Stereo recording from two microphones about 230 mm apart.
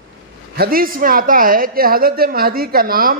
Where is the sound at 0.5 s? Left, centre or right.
Right.